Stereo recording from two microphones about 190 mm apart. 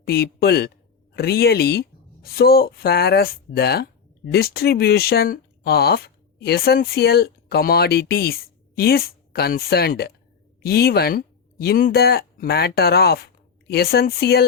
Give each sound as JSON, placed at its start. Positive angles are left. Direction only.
{"t": 0.0, "sound": "speech", "side_deg": 55}